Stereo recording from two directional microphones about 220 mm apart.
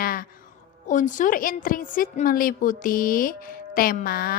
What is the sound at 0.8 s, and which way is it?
A woman's voice, 35° left (ahead or behind).